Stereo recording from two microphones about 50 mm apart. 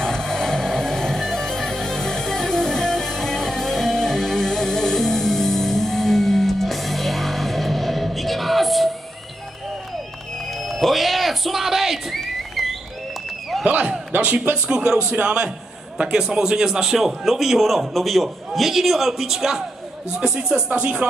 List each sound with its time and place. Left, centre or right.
0.0 s music: centre
10.6 s music: centre
13.7 s a sound: right
14.1 s speech: right
14.7 s a man's voice: centre
20.1 s speech: centre